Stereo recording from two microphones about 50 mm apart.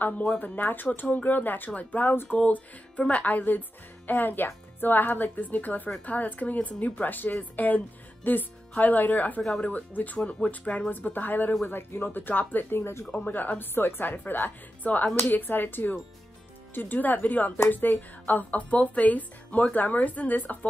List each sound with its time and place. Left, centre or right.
0.4 s speech: left
3.3 s speech: left
9.4 s speech: centre
9.7 s speech: left